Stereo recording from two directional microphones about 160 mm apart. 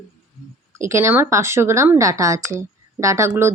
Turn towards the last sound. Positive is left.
turn(degrees=-15)  # may be behind; listen again after turning